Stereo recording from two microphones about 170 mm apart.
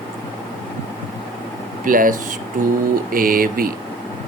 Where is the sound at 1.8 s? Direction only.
55° right (ahead or behind).